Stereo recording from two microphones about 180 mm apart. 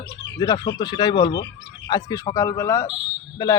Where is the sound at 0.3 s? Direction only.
20° left (ahead or behind).